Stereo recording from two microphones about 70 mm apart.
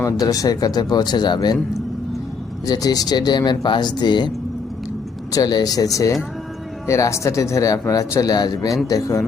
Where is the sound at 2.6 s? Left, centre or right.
Left.